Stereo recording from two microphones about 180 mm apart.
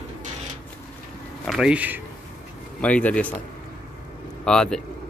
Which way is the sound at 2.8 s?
5° left (ahead or behind).